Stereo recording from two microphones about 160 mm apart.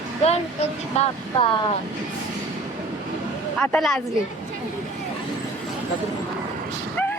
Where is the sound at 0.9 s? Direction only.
40° left (ahead or behind).